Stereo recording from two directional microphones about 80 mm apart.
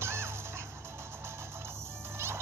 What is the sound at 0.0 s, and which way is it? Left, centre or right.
Music, right.